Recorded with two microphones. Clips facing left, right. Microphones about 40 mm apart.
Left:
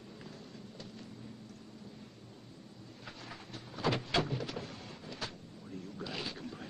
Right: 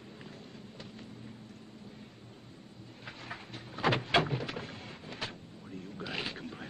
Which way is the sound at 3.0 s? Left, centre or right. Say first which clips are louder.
Right 4 dB; right.